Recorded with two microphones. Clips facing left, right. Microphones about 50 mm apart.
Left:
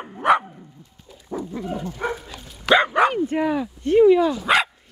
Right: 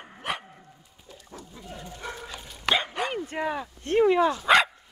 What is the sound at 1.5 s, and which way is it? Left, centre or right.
Dog, left.